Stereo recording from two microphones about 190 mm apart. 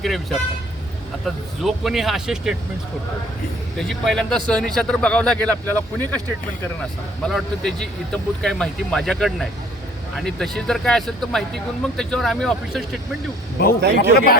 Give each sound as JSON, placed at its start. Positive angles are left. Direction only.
{"t": 0.0, "sound": "speech", "side_deg": 0}
{"t": 3.8, "sound": "speech", "side_deg": 0}
{"t": 7.2, "sound": "speech", "side_deg": 0}
{"t": 13.6, "sound": "a man's voice", "side_deg": 55}